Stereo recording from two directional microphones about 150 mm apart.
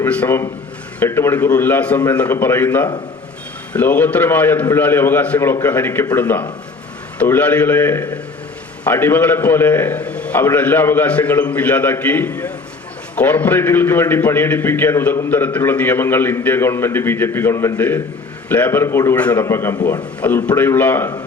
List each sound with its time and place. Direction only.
0.0 s a man's voice: 10° left (ahead or behind)